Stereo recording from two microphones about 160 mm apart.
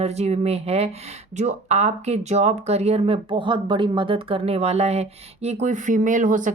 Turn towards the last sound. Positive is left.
turn(degrees=-55)  # may be behind; listen again after turning